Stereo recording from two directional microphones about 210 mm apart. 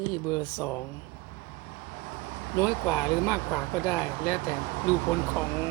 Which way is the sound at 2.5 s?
15° left (ahead or behind).